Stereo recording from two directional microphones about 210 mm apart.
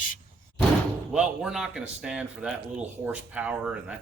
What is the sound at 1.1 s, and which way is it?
Speech, 5° right (ahead or behind).